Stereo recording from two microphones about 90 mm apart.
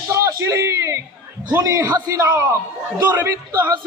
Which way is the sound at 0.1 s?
35° right (ahead or behind).